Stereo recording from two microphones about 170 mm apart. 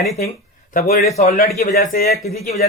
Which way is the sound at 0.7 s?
60° left (ahead or behind).